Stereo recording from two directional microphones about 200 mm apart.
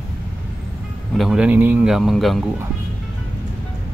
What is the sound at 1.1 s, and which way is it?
A man's voice, 5° right (ahead or behind).